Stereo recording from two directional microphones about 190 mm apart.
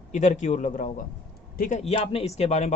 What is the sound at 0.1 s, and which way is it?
A man's voice, 40° left (ahead or behind).